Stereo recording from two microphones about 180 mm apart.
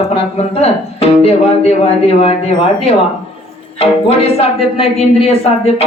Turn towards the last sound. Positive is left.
turn(degrees=35)  # may be behind; listen again after turning